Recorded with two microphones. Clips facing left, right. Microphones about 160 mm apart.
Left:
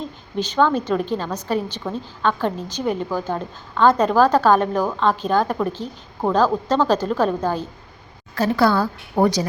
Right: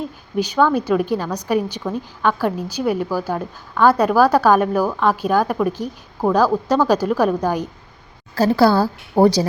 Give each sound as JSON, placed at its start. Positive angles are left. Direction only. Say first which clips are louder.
{"t": 0.0, "sound": "a woman's voice", "louder": "right 4 dB", "side_deg": -10}
{"t": 8.4, "sound": "a woman's voice", "louder": "right 3 dB", "side_deg": -35}